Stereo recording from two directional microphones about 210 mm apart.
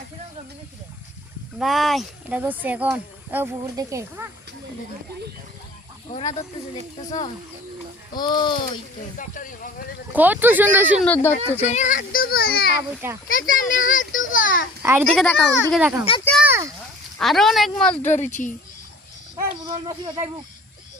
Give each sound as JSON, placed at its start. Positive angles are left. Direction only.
{"t": 1.5, "sound": "speech", "side_deg": 0}
{"t": 8.1, "sound": "speech", "side_deg": 20}
{"t": 9.0, "sound": "a child's voice", "side_deg": 40}
{"t": 10.1, "sound": "speech", "side_deg": -5}
{"t": 11.0, "sound": "speech", "side_deg": 10}
{"t": 11.4, "sound": "a child's voice", "side_deg": 30}
{"t": 14.8, "sound": "a child's voice", "side_deg": -10}
{"t": 15.0, "sound": "speech", "side_deg": 5}
{"t": 17.2, "sound": "speech", "side_deg": 0}
{"t": 18.0, "sound": "a child's voice", "side_deg": 35}
{"t": 19.6, "sound": "speech", "side_deg": -20}